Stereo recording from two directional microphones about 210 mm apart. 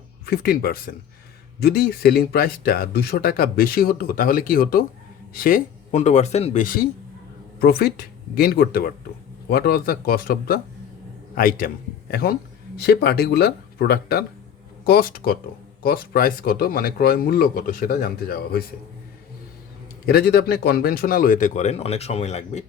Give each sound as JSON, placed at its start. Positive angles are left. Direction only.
{"t": 0.3, "sound": "a man's voice", "side_deg": 45}
{"t": 20.1, "sound": "a man's voice", "side_deg": 45}